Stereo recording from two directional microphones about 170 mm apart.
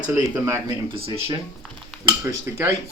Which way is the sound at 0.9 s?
30° right (ahead or behind).